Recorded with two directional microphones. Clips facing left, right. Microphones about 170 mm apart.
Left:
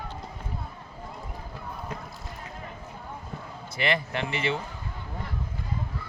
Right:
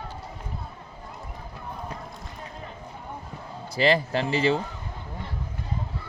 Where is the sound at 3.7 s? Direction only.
30° right (ahead or behind).